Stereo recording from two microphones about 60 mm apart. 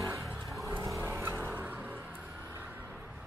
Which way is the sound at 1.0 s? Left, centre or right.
Right.